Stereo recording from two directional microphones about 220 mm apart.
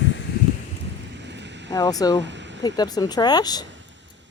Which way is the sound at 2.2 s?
55° right (ahead or behind).